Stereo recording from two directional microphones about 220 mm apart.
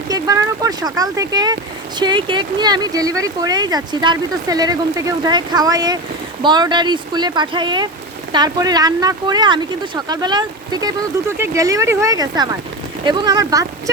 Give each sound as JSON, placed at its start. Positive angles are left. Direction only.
{"t": 0.1, "sound": "speech", "side_deg": -15}